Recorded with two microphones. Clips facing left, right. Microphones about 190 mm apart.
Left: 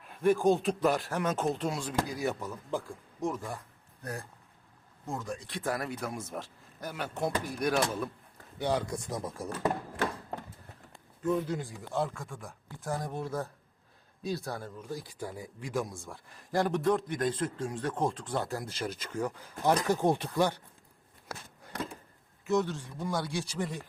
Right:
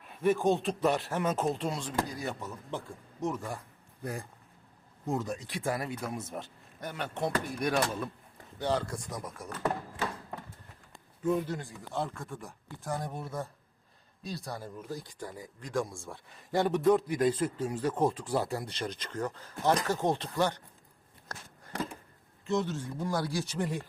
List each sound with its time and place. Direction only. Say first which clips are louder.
0.0 s a man's voice: left 2 dB; centre (ahead or behind)
4.0 s speech: right 2 dB; 15° right (ahead or behind)
5.5 s a man's voice: left 3 dB; centre (ahead or behind)
8.5 s speech: left 1 dB; 10° left (ahead or behind); by 9.6 s 30° left (ahead or behind)
11.2 s a man's voice: even; 5° right (ahead or behind); by 20.6 s 10° left (ahead or behind)
21.3 s a sound: left 3 dB; 10° left (ahead or behind)
22.7 s a man's voice: right 1 dB; centre (ahead or behind)